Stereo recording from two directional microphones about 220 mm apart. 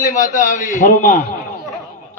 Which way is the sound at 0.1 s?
35° left (ahead or behind).